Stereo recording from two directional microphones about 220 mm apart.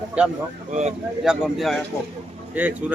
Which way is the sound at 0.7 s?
30° right (ahead or behind).